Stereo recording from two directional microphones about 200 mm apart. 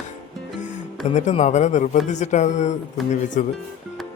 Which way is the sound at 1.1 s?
35° left (ahead or behind).